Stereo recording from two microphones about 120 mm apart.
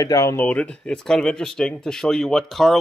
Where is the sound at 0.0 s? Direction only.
30° left (ahead or behind).